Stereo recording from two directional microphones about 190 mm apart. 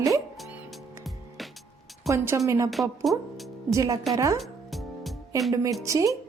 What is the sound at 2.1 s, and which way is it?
Speech, 15° right (ahead or behind).